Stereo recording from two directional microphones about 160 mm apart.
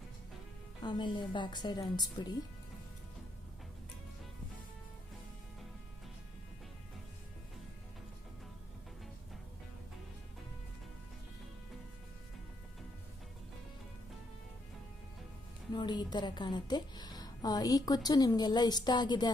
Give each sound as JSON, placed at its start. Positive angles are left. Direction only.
{"t": 0.8, "sound": "a woman's voice", "side_deg": 30}
{"t": 15.7, "sound": "a woman's voice", "side_deg": 30}